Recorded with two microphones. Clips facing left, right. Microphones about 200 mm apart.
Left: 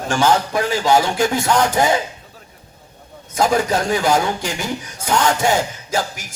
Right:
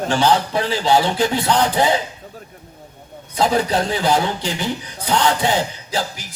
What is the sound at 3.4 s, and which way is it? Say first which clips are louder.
A man's voice: left 1 dB; 45° left (ahead or behind).